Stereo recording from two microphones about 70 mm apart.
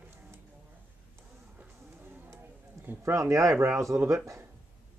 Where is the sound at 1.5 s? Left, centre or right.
Right.